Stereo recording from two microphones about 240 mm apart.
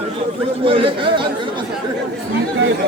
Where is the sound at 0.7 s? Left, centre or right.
Right.